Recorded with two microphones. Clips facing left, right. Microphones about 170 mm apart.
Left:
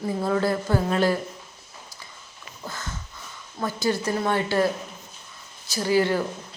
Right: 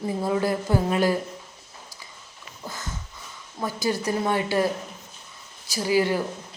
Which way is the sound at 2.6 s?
15° right (ahead or behind).